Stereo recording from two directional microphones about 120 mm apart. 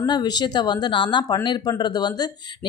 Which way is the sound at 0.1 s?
35° left (ahead or behind).